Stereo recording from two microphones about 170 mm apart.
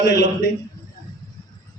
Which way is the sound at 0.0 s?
90° left.